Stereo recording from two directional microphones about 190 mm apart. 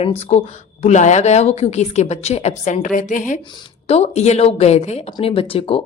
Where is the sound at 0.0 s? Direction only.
35° left (ahead or behind).